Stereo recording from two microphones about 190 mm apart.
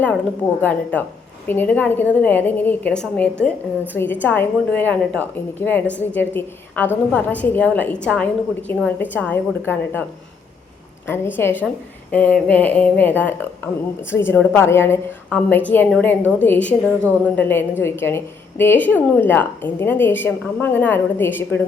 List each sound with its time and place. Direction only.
0.6 s a woman's voice: 10° left (ahead or behind)
11.0 s a woman's voice: 10° left (ahead or behind)